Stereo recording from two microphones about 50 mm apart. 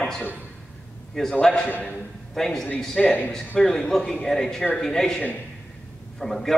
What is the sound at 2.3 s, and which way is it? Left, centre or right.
A man's voice, centre.